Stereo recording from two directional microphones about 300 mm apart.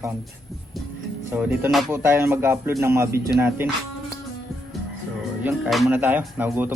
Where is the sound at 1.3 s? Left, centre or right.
Centre.